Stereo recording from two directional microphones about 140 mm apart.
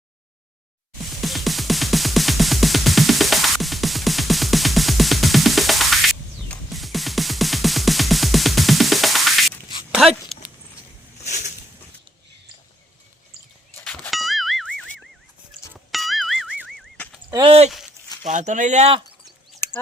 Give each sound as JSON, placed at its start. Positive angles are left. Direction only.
{"t": 1.2, "sound": "music", "side_deg": 0}
{"t": 10.3, "sound": "a sound", "side_deg": 0}
{"t": 13.7, "sound": "boing", "side_deg": 10}
{"t": 15.9, "sound": "music", "side_deg": 0}
{"t": 16.6, "sound": "fowl", "side_deg": 0}
{"t": 17.4, "sound": "speech", "side_deg": -50}
{"t": 18.2, "sound": "speech", "side_deg": -60}